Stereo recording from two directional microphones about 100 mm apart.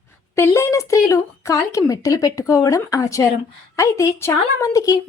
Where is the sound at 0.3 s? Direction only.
25° left (ahead or behind).